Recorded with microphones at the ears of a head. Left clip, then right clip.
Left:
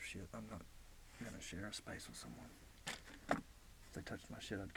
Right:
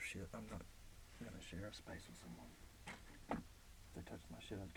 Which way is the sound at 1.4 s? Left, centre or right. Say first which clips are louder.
Left 4 dB; left.